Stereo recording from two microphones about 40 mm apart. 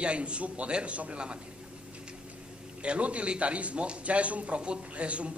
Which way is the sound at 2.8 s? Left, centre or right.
Right.